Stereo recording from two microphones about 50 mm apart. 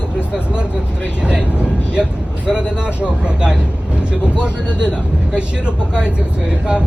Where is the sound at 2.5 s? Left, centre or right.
Centre.